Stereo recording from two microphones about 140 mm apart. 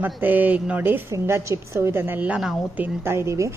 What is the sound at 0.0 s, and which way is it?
A woman's voice, 10° right (ahead or behind).